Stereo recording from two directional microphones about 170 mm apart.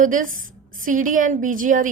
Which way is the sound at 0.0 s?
50° right (ahead or behind).